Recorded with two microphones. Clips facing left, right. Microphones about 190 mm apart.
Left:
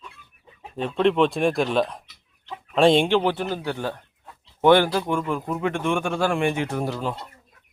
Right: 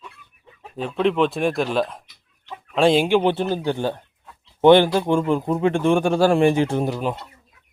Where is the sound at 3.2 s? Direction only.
25° right (ahead or behind).